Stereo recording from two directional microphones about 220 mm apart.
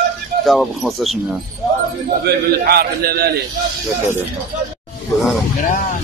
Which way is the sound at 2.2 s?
45° right (ahead or behind).